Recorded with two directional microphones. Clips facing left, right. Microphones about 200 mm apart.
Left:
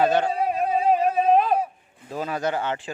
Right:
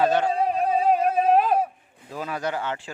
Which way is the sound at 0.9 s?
Centre (ahead or behind).